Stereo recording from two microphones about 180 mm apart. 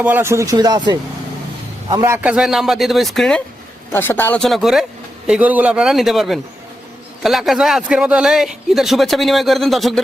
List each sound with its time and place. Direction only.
0.0 s a man's voice: 10° right (ahead or behind)